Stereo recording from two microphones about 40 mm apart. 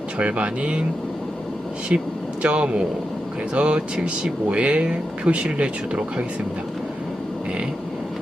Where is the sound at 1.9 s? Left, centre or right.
Right.